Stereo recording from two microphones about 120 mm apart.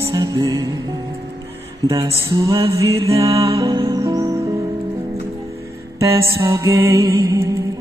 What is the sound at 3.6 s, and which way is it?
Music, 35° right (ahead or behind).